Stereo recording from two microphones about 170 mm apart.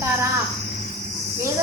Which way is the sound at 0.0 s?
15° right (ahead or behind).